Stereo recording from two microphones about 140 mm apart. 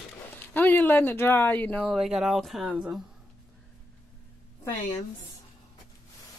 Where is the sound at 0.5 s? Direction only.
15° left (ahead or behind).